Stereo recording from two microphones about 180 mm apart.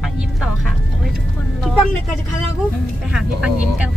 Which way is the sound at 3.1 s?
5° right (ahead or behind).